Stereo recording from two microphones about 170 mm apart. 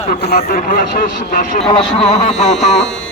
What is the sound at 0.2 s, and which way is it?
A man's voice, 70° left (ahead or behind).